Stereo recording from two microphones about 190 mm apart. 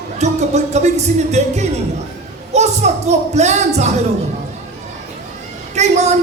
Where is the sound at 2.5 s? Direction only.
35° right (ahead or behind).